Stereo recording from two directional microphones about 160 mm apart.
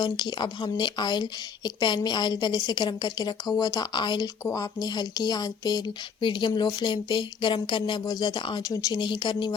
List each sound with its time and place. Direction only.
0.0 s a woman's voice: 25° left (ahead or behind)